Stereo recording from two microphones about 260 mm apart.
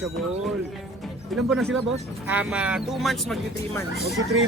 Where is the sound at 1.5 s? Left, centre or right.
Centre.